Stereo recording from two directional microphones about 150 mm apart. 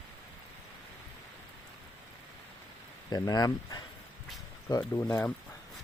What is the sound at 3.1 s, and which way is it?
Speech, 25° left (ahead or behind).